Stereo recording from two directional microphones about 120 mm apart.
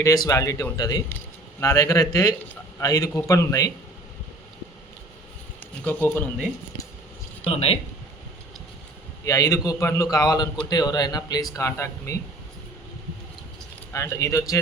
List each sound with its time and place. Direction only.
0.0 s a man's voice: 30° left (ahead or behind)
5.8 s speech: 15° left (ahead or behind)
7.4 s speech: 55° left (ahead or behind)
9.2 s a man's voice: 30° left (ahead or behind)
13.9 s a man's voice: 25° left (ahead or behind)